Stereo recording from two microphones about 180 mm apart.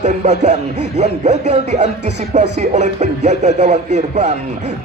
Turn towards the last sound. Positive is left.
turn(degrees=-40)  # may be behind; listen again after turning